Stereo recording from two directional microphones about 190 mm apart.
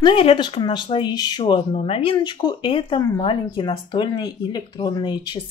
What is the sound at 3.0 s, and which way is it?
Speech, 15° left (ahead or behind).